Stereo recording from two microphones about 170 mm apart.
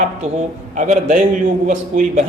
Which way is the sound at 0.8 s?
45° right (ahead or behind).